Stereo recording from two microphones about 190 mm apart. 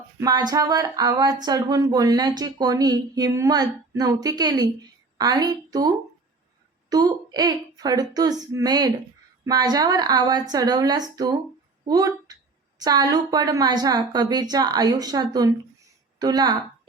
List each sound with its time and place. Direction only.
0.2 s speech: 20° right (ahead or behind)
6.9 s a woman's voice: 20° right (ahead or behind)